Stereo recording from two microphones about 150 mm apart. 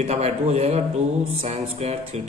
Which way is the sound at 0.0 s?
45° right (ahead or behind).